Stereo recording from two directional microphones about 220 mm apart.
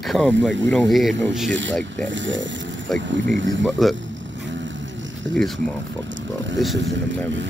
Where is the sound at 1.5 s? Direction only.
55° right (ahead or behind).